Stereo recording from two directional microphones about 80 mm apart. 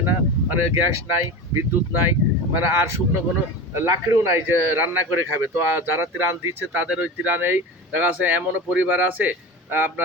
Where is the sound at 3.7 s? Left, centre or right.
Right.